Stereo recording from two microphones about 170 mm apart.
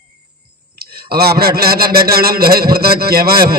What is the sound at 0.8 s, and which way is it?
A man's voice, 65° right (ahead or behind).